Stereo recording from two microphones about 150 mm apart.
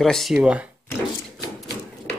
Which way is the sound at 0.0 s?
Centre (ahead or behind).